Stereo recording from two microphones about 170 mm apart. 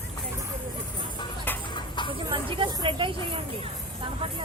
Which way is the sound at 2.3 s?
30° right (ahead or behind).